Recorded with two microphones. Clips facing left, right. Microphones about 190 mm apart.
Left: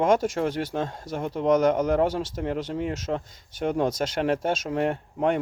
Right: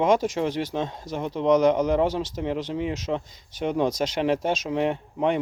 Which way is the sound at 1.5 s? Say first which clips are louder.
Right 1 dB; 50° left (ahead or behind).